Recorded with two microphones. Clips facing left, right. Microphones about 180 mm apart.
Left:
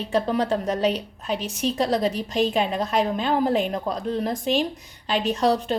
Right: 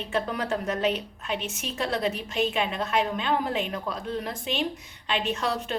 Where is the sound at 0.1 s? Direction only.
35° left (ahead or behind).